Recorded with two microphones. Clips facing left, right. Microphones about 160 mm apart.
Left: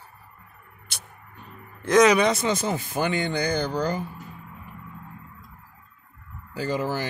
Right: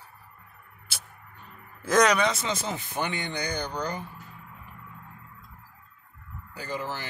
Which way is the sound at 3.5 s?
90° left.